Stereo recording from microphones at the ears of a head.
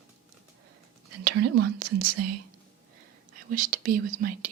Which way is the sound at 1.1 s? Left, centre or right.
Right.